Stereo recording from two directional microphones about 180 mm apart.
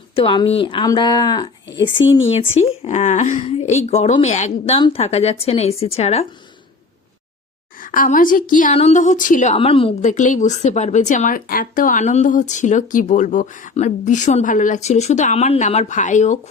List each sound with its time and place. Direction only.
0.2 s speech: 30° left (ahead or behind)
2.6 s a woman's voice: 40° left (ahead or behind)
7.8 s speech: 50° left (ahead or behind); by 10.1 s 30° left (ahead or behind)
10.1 s speech: 45° left (ahead or behind)